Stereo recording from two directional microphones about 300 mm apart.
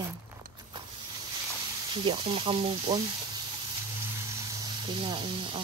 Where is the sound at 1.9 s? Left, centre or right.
Centre.